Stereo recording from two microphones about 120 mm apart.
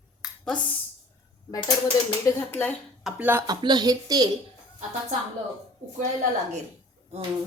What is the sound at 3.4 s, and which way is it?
Speech, 35° right (ahead or behind).